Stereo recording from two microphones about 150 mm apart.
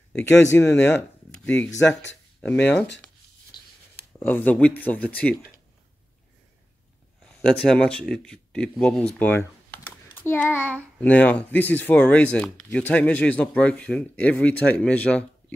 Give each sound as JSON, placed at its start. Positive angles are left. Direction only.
{"t": 0.3, "sound": "speech", "side_deg": 15}
{"t": 3.5, "sound": "writing", "side_deg": 30}
{"t": 4.2, "sound": "speech", "side_deg": 10}
{"t": 7.2, "sound": "a child's voice", "side_deg": 5}